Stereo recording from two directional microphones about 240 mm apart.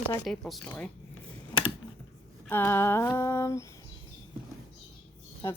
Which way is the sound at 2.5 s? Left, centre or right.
Centre.